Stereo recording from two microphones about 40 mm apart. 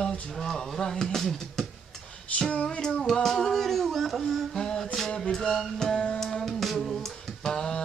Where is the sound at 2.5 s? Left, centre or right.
Left.